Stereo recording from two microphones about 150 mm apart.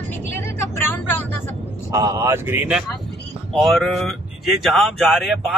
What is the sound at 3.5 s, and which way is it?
Speech, centre (ahead or behind).